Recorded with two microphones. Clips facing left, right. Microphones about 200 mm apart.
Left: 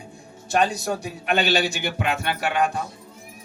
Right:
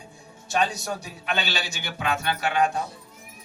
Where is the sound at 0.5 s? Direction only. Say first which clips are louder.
Left 4 dB; 55° left (ahead or behind).